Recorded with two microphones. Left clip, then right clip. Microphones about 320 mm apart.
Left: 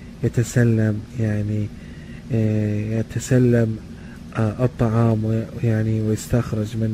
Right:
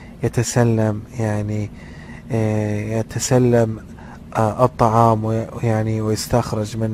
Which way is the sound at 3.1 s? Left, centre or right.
Centre.